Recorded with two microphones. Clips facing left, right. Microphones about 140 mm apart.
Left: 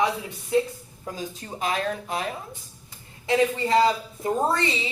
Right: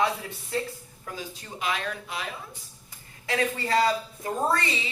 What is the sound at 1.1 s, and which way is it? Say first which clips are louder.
Speech: left 4 dB; 35° left (ahead or behind).